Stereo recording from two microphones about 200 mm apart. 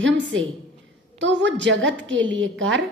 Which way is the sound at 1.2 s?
65° right (ahead or behind).